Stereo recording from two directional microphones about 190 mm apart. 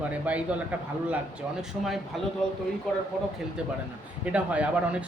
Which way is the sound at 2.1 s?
Centre (ahead or behind).